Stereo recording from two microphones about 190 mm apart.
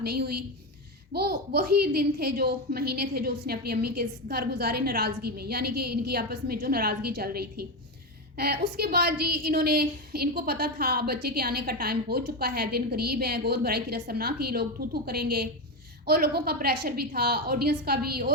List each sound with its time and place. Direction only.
0.0 s a child's voice: 55° right (ahead or behind)
8.8 s a child's voice: 55° right (ahead or behind)